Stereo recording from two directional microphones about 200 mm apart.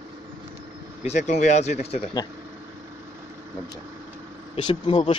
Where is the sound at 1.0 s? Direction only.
35° left (ahead or behind).